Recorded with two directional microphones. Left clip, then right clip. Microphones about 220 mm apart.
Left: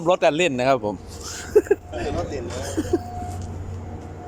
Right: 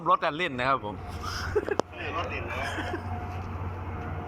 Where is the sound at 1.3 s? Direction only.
45° left (ahead or behind).